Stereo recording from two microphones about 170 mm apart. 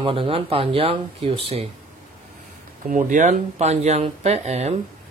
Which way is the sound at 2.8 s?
50° right (ahead or behind).